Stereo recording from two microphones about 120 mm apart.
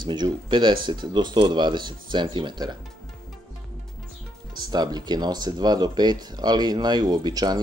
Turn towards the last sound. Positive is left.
turn(degrees=-35)  # may be behind; listen again after turning